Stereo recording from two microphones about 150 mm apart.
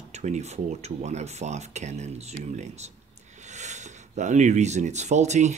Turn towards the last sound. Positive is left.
turn(degrees=-50)  # may be behind; listen again after turning